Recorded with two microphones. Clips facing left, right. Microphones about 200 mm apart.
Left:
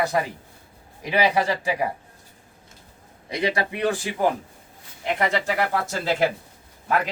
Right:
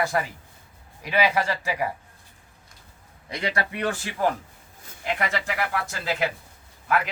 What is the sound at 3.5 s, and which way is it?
Speech, 15° left (ahead or behind).